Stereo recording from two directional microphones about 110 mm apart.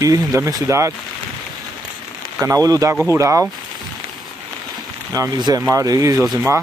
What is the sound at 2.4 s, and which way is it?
Speech, 30° right (ahead or behind).